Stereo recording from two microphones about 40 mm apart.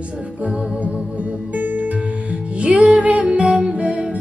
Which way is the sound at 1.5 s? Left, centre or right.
Right.